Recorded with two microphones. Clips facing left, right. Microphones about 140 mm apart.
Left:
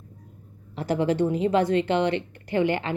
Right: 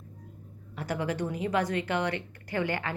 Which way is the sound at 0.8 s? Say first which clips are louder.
Left 8 dB; 30° left (ahead or behind).